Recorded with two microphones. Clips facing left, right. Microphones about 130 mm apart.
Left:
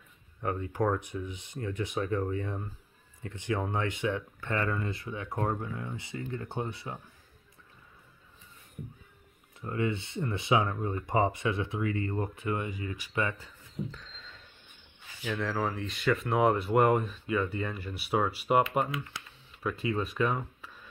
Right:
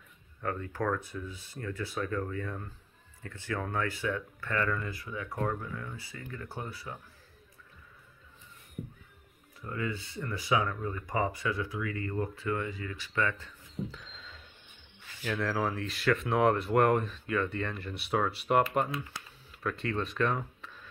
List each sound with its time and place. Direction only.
0.4 s speech: 20° left (ahead or behind)
9.6 s speech: 25° left (ahead or behind)
13.9 s a sound: 5° right (ahead or behind)
15.3 s speech: centre (ahead or behind)